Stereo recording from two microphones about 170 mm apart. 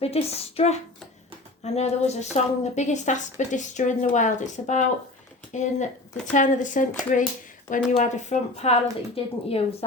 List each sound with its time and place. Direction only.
0.0 s a woman's voice: 35° left (ahead or behind)